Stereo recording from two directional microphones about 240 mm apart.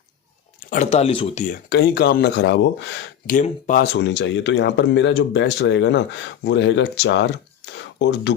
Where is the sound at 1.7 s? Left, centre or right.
Left.